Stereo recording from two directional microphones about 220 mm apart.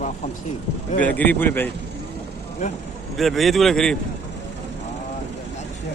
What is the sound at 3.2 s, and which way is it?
Speech, centre (ahead or behind).